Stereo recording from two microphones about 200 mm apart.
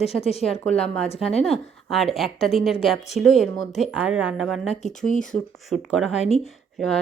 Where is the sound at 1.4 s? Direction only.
Centre (ahead or behind).